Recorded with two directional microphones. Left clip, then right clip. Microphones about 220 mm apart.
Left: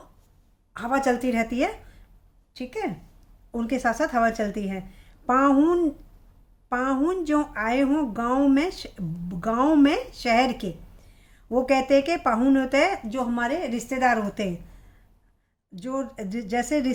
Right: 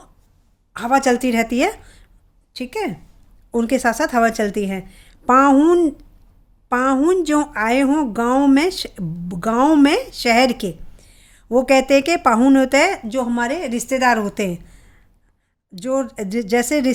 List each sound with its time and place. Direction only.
0.7 s a woman's voice: 40° right (ahead or behind)